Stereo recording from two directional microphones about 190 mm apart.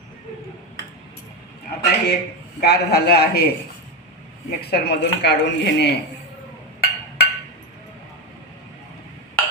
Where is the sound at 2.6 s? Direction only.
60° left (ahead or behind).